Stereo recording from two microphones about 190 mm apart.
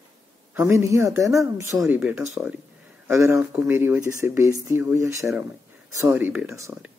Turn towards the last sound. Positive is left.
turn(degrees=-10)  # may be behind; listen again after turning